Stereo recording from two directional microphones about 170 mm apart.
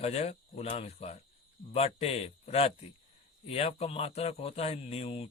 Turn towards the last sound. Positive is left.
turn(degrees=35)  # may be behind; listen again after turning